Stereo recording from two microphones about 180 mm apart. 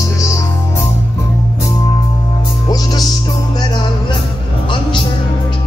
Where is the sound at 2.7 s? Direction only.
20° left (ahead or behind).